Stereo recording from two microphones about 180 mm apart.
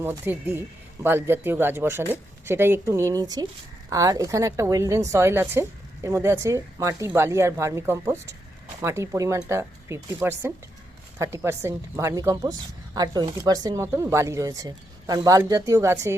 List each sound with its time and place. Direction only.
0.0 s a woman's voice: 15° right (ahead or behind)